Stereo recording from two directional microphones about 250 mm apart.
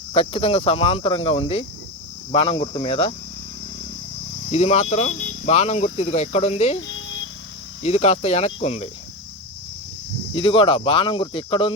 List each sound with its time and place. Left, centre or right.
0.1 s speech: left
4.4 s speech: left
6.7 s a sound: left
7.8 s speech: left
10.3 s speech: left